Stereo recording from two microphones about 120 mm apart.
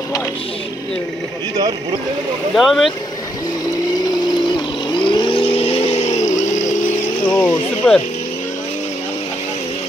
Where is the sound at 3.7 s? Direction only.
35° left (ahead or behind); by 6.7 s 85° left.